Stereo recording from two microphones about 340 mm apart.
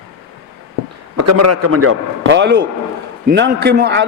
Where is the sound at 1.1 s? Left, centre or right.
Right.